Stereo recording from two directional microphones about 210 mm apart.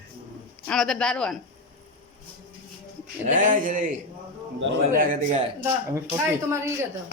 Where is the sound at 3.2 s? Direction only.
40° right (ahead or behind).